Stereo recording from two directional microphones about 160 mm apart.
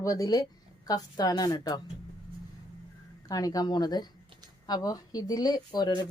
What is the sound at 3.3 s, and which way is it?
A woman's voice, 25° left (ahead or behind).